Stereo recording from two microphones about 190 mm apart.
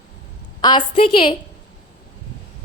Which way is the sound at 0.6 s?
25° left (ahead or behind).